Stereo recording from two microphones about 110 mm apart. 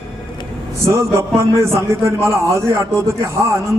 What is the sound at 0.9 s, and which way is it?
A man's voice, 25° right (ahead or behind).